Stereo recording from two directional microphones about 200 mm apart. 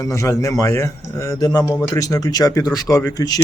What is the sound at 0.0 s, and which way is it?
Speech, 15° left (ahead or behind).